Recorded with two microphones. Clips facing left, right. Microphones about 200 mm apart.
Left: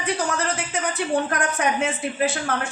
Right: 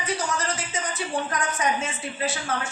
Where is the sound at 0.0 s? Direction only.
60° left (ahead or behind).